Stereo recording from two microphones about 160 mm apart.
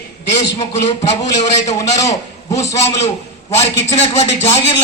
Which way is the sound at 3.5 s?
45° left (ahead or behind).